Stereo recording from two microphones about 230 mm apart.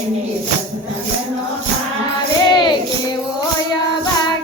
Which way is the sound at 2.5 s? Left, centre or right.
Centre.